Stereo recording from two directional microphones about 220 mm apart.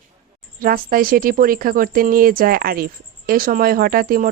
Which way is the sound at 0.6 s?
40° right (ahead or behind).